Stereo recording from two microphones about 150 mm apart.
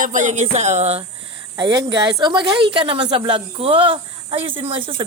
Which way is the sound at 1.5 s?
30° right (ahead or behind).